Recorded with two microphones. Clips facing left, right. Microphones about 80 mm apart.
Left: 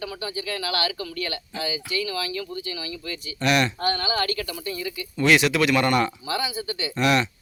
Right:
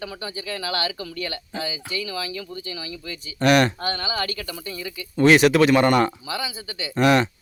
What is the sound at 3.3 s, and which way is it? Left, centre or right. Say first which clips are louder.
Speech: right 5 dB; right.